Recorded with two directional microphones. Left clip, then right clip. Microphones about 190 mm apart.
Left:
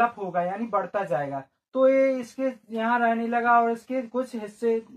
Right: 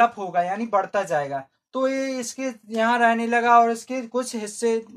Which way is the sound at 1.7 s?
25° right (ahead or behind).